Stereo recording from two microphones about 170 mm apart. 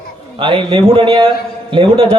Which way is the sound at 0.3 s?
30° right (ahead or behind).